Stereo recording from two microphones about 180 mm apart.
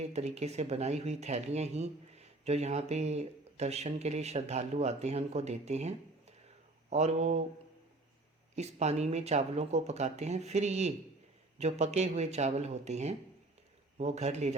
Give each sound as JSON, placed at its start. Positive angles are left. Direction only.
{"t": 0.0, "sound": "speech", "side_deg": -35}
{"t": 6.9, "sound": "speech", "side_deg": -40}
{"t": 8.5, "sound": "speech", "side_deg": -40}